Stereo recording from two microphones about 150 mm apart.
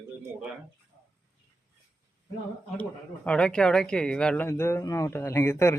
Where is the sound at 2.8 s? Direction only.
5° left (ahead or behind).